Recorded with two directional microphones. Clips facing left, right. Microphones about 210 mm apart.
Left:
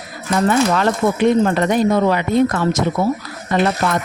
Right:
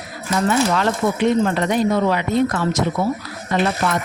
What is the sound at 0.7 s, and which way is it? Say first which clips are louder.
Speech: left 2 dB; 50° left (ahead or behind).